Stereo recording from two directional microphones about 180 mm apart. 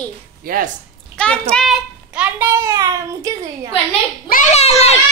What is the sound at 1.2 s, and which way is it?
Speech, 5° left (ahead or behind).